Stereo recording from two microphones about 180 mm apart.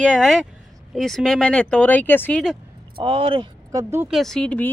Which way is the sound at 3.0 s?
30° right (ahead or behind).